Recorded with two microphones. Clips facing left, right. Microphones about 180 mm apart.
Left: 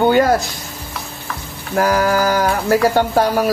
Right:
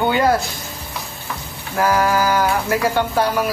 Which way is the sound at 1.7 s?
40° left (ahead or behind).